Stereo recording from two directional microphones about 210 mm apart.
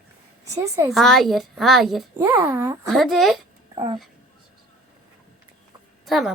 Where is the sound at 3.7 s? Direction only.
20° right (ahead or behind).